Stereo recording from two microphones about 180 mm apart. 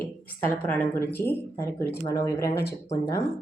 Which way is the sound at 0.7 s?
10° left (ahead or behind).